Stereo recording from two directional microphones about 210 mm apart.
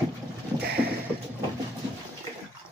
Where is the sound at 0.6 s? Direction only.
50° right (ahead or behind).